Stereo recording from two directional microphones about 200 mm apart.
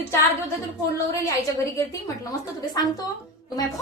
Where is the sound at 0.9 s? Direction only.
15° left (ahead or behind).